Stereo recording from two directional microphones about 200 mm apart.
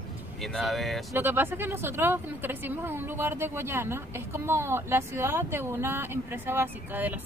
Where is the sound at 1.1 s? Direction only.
10° right (ahead or behind).